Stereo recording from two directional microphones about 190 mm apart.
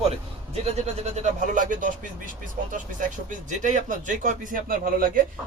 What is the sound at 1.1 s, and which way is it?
Speech, 40° right (ahead or behind).